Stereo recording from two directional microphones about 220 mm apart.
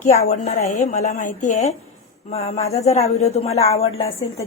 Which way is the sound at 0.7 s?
30° left (ahead or behind).